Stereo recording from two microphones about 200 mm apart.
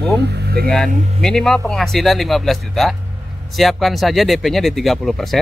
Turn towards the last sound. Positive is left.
turn(degrees=0)  # may be behind; listen again after turning